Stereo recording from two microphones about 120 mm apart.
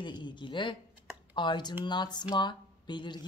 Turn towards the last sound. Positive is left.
turn(degrees=40)  # may be behind; listen again after turning